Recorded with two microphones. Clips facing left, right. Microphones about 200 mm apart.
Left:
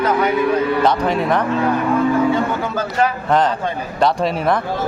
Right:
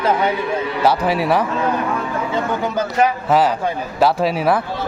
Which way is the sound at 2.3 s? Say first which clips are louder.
Left 1 dB; 20° right (ahead or behind).